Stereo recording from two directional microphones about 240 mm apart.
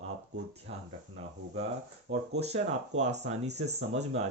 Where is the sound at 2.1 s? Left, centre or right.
Right.